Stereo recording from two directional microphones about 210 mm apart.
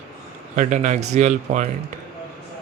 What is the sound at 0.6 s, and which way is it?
Speech, 35° right (ahead or behind).